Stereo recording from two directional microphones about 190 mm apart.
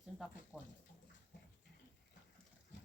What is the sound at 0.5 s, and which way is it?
Speech, centre (ahead or behind).